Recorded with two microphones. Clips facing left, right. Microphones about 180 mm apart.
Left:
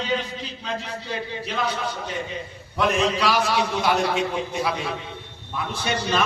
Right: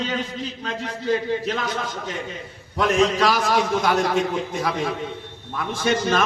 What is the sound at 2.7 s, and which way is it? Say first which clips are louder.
A man's voice: right 3 dB; 45° right (ahead or behind).